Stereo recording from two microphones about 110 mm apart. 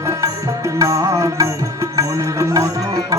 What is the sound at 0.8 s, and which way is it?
Music, 30° right (ahead or behind).